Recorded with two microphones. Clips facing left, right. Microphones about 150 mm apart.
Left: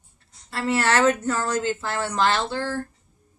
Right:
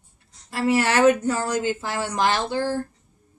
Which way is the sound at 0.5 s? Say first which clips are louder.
Right 2 dB; 15° right (ahead or behind).